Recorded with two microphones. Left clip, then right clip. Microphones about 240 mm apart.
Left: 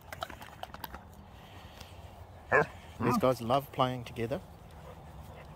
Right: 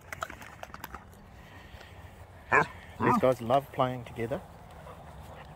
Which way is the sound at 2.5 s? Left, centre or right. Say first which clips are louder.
Right 2 dB; left.